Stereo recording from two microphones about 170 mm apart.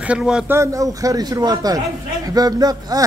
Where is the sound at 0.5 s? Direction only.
20° right (ahead or behind).